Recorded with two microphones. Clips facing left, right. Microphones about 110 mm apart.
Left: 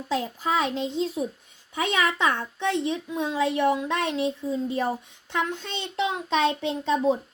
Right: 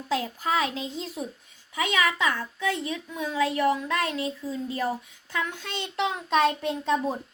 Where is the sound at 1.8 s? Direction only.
30° left (ahead or behind).